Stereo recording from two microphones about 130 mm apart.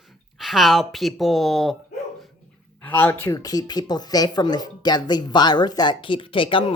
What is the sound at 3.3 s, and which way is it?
Speech, 30° left (ahead or behind).